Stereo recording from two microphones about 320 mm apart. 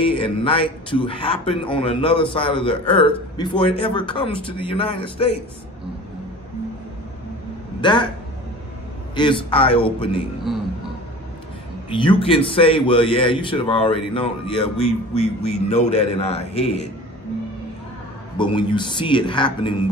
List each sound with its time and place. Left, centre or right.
0.0 s a man's voice: centre
7.8 s a man's voice: centre
9.1 s a man's voice: centre
10.5 s beatboxing: centre
11.9 s a man's voice: centre
15.7 s a man's voice: left
18.4 s a man's voice: centre